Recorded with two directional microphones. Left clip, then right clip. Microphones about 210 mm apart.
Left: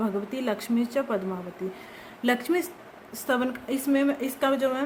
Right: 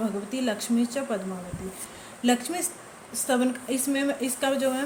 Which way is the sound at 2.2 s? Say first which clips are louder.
Left 1 dB; 35° left (ahead or behind).